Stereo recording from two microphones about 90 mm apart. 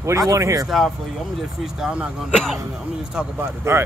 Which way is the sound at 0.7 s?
Centre (ahead or behind).